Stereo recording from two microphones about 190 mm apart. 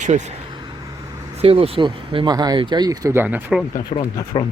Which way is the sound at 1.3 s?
30° right (ahead or behind).